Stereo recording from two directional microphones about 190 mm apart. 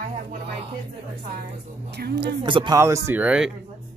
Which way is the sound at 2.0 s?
55° right (ahead or behind).